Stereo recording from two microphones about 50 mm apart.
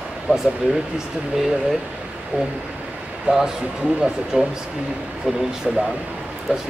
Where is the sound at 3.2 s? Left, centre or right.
Centre.